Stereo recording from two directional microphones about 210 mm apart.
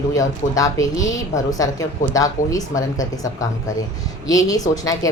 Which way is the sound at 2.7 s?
35° left (ahead or behind).